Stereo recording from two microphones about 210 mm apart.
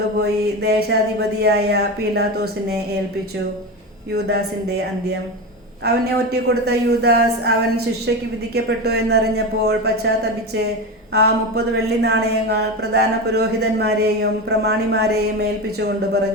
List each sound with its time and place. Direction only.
0.2 s a woman's voice: 50° right (ahead or behind)
4.1 s a woman's voice: 50° right (ahead or behind)
5.8 s a woman's voice: 50° right (ahead or behind)
8.5 s a woman's voice: 50° right (ahead or behind)
11.1 s a woman's voice: 50° right (ahead or behind)